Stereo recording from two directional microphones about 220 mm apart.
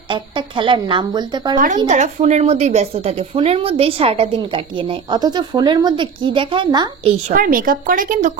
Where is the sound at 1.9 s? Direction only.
30° right (ahead or behind).